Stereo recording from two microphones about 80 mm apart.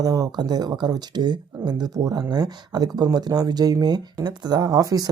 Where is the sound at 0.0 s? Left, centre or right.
Right.